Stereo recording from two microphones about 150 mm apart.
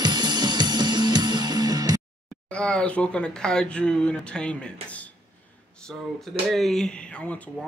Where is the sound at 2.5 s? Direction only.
5° left (ahead or behind).